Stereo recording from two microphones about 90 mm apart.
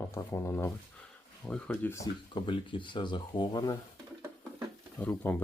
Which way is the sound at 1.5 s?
10° left (ahead or behind).